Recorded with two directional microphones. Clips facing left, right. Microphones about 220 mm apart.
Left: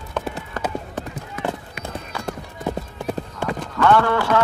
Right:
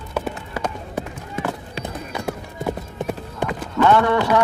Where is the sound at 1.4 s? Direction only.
25° right (ahead or behind).